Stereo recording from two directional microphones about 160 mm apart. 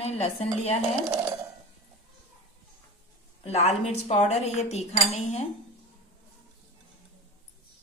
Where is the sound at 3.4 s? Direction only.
40° left (ahead or behind).